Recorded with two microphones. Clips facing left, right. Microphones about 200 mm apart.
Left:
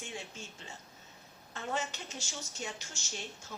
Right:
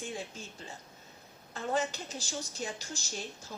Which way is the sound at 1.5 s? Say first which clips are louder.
Right 5 dB; 35° right (ahead or behind).